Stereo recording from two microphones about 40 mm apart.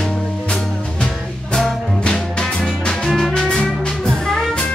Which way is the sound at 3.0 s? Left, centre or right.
Centre.